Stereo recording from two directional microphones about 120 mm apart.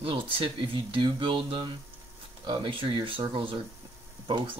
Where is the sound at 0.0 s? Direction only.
45° right (ahead or behind).